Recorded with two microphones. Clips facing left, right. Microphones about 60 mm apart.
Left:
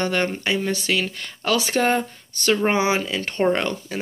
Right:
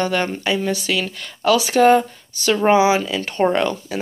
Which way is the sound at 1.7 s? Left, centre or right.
Centre.